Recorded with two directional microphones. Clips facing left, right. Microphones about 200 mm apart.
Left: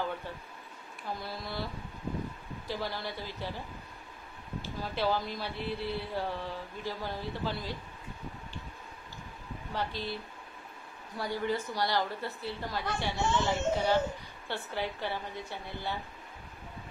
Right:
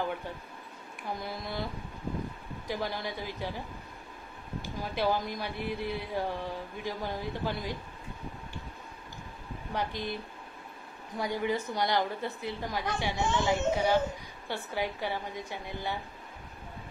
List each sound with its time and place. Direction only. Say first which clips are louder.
1.2 s speech: right 2 dB; 20° right (ahead or behind)
2.7 s speech: right 2 dB; 15° right (ahead or behind)
9.8 s speech: right 2 dB; 15° right (ahead or behind)
11.1 s speech: right 2 dB; 15° right (ahead or behind)